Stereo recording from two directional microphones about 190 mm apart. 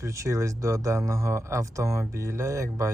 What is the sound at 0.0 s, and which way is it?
Speech, 15° right (ahead or behind).